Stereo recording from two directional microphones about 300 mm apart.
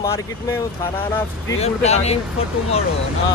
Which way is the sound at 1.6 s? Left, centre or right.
Left.